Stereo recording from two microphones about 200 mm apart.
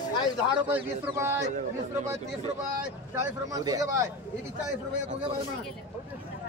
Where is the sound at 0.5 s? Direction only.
10° right (ahead or behind).